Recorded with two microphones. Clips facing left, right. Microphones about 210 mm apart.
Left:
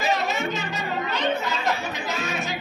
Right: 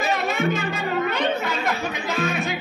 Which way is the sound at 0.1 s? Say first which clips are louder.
Right 3 dB; 55° right (ahead or behind).